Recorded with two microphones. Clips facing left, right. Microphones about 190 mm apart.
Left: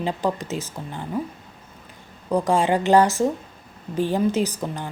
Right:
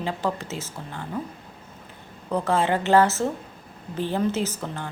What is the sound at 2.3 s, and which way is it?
Speech, 15° left (ahead or behind).